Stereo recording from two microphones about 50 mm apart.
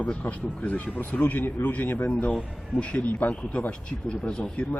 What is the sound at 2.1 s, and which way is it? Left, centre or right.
Speech, left.